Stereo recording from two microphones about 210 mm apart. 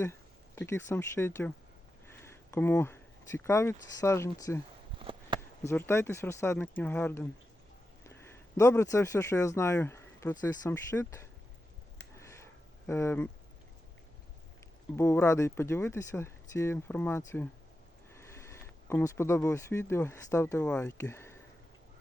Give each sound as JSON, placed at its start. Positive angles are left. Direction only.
{"t": 0.0, "sound": "speech", "side_deg": 10}
{"t": 4.9, "sound": "a sound", "side_deg": -25}
{"t": 5.6, "sound": "a man's voice", "side_deg": 10}
{"t": 12.1, "sound": "a sound", "side_deg": 15}
{"t": 12.9, "sound": "speech", "side_deg": 10}
{"t": 14.9, "sound": "speech", "side_deg": 10}